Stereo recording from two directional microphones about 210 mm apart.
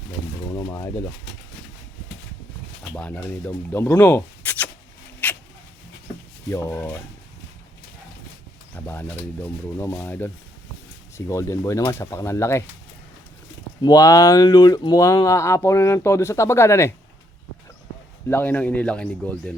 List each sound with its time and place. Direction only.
0.5 s a sound: 15° left (ahead or behind)
2.9 s speech: 5° left (ahead or behind)
5.2 s a sound: 10° left (ahead or behind)
6.5 s speech: 10° left (ahead or behind)
8.7 s speech: 10° left (ahead or behind)
13.8 s speech: 15° left (ahead or behind)
18.3 s speech: 10° left (ahead or behind)